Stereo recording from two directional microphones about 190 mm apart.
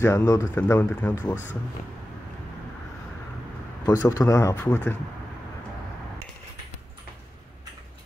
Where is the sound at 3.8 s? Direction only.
20° left (ahead or behind).